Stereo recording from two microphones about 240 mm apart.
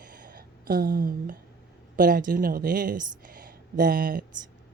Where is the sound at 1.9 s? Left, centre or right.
Right.